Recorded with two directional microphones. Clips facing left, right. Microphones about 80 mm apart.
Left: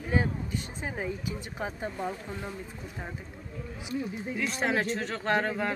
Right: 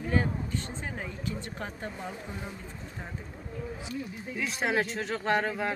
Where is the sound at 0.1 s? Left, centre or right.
Centre.